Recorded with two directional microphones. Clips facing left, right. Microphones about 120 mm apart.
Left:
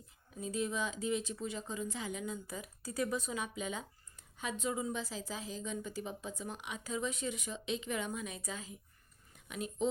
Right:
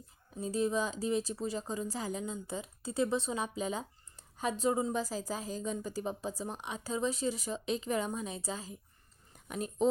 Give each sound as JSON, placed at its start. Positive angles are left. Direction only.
{"t": 0.3, "sound": "speech", "side_deg": -35}